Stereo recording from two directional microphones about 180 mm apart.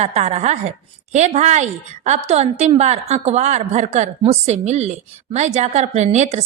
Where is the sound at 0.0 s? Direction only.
35° right (ahead or behind).